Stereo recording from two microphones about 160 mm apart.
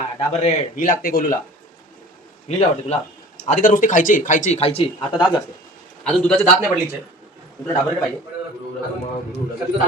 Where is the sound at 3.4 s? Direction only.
55° left (ahead or behind); by 5.2 s 30° left (ahead or behind).